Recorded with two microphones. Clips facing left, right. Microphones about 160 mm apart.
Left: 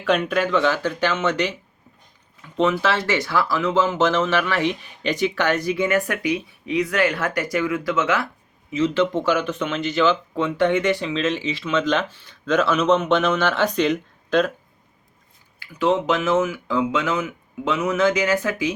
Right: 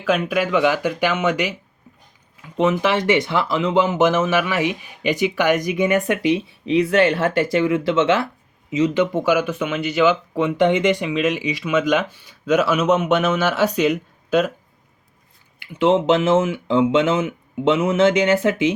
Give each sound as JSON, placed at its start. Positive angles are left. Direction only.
{"t": 0.0, "sound": "speech", "side_deg": -5}
{"t": 8.7, "sound": "speech", "side_deg": -15}
{"t": 15.5, "sound": "speech", "side_deg": -25}